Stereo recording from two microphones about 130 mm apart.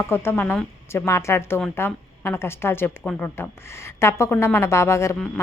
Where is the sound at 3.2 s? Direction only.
20° left (ahead or behind).